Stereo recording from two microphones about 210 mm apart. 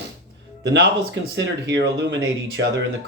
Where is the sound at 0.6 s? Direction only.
55° right (ahead or behind).